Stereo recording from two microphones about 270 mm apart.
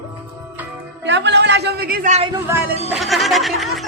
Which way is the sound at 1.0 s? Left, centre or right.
Right.